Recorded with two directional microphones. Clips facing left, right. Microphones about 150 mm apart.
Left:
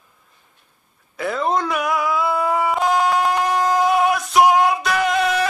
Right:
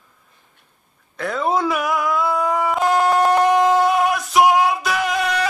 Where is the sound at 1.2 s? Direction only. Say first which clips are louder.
Right 1 dB; centre (ahead or behind).